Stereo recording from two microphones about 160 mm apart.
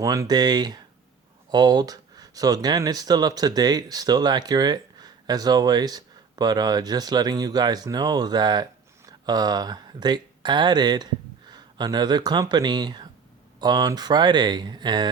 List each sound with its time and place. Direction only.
0.0 s speech: 20° right (ahead or behind)